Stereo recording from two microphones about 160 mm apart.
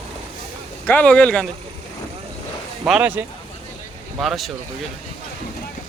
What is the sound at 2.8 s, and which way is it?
Speech, 10° right (ahead or behind).